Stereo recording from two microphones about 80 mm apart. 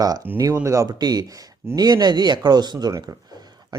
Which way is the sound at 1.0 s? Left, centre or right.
Right.